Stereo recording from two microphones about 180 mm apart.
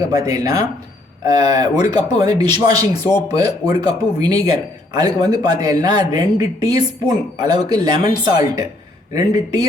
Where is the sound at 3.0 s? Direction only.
15° left (ahead or behind).